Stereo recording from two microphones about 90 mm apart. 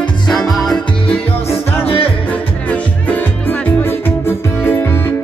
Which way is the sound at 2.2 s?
15° left (ahead or behind).